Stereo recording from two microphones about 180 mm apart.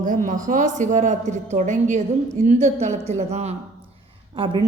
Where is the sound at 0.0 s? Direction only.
45° right (ahead or behind).